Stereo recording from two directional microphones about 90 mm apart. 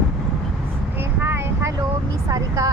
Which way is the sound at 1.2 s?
25° right (ahead or behind).